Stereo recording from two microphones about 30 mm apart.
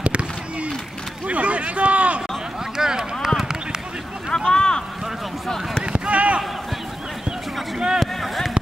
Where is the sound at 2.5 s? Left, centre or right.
Centre.